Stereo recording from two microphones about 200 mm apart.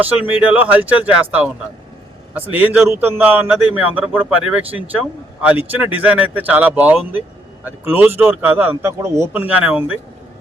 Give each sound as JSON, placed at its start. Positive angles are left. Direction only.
{"t": 0.0, "sound": "speech", "side_deg": -10}